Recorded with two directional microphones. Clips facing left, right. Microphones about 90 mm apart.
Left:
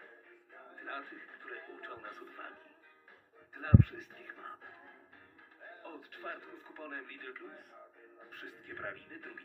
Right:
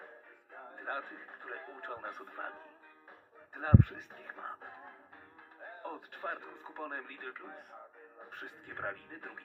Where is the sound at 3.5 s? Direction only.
20° right (ahead or behind).